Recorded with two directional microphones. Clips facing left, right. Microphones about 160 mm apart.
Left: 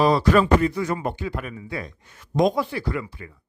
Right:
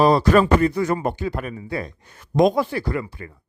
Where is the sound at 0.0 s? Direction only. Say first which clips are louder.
Right 2 dB; 40° right (ahead or behind).